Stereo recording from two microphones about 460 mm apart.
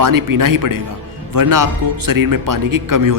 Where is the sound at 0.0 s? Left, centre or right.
Right.